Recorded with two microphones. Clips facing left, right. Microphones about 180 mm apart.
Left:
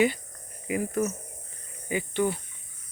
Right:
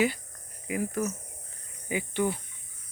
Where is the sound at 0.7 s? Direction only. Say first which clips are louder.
Left 3 dB; centre (ahead or behind).